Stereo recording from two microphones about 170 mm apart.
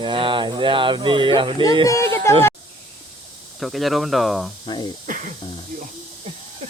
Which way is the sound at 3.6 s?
Centre (ahead or behind).